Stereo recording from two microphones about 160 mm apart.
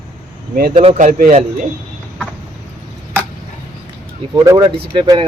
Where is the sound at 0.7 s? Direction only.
40° right (ahead or behind).